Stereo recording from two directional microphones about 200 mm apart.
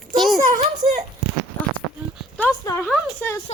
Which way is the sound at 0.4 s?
35° right (ahead or behind).